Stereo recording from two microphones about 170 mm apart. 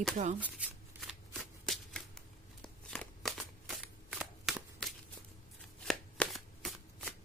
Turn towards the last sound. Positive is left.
turn(degrees=5)  # may be behind; listen again after turning